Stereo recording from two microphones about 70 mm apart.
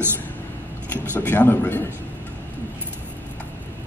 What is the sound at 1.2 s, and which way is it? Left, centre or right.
Speech, left.